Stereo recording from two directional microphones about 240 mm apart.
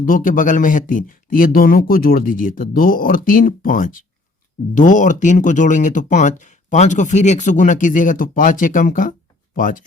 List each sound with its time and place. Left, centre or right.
0.0 s speech: left